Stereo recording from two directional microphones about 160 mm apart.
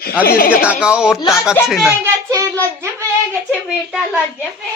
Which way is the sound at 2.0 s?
20° right (ahead or behind).